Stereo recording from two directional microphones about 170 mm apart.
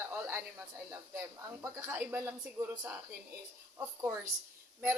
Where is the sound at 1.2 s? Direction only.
15° right (ahead or behind).